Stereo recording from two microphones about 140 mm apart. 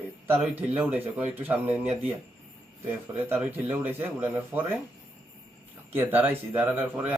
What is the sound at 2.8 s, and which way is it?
Speech, 15° right (ahead or behind).